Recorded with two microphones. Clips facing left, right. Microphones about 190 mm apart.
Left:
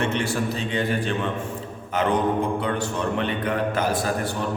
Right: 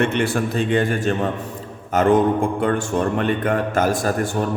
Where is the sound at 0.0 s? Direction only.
55° right (ahead or behind).